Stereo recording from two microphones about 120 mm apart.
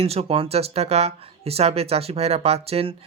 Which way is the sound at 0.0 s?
55° right (ahead or behind).